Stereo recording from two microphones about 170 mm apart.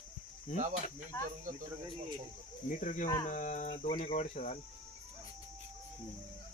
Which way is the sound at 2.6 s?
50° left (ahead or behind).